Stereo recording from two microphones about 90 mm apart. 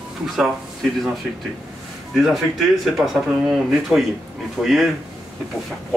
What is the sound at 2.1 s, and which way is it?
Speech, centre (ahead or behind).